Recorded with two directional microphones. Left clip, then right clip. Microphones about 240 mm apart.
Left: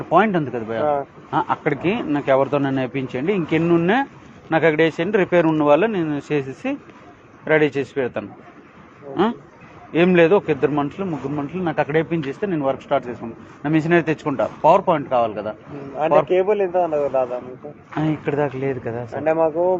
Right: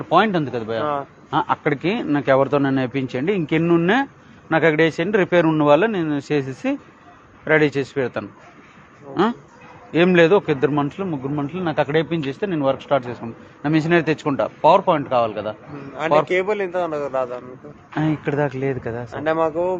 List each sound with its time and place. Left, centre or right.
0.1 s a man's voice: right
9.9 s a man's voice: right
17.9 s a man's voice: right
19.1 s speech: right